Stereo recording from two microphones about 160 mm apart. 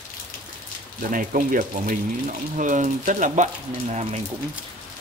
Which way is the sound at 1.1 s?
60° right (ahead or behind).